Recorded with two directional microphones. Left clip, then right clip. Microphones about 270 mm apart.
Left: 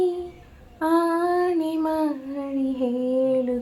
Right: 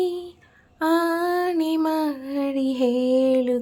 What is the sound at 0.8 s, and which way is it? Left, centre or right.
Child singing, right.